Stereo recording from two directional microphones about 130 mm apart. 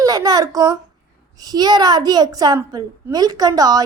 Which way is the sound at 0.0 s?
30° right (ahead or behind).